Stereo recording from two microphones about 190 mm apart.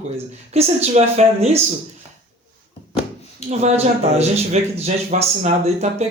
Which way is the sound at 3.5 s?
35° right (ahead or behind).